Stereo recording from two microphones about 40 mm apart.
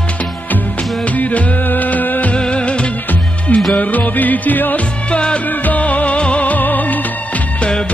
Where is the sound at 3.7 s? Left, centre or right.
Left.